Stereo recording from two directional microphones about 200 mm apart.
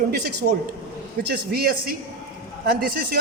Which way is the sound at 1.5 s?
50° right (ahead or behind).